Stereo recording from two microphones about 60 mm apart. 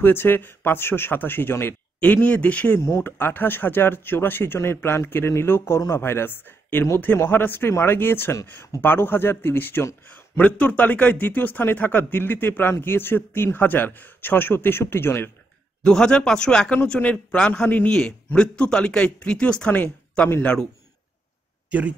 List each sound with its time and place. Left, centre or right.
0.0 s speech: left
2.1 s speech: left
3.0 s speech: left
10.0 s a sound: left
10.4 s speech: left
15.8 s speech: centre
21.6 s speech: right